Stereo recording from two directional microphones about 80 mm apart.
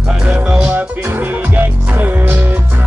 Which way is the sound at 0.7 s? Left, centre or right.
Right.